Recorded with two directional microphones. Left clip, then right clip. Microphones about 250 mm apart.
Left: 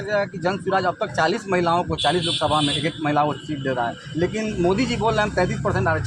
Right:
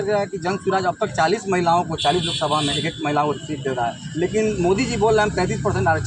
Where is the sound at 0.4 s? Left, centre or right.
Left.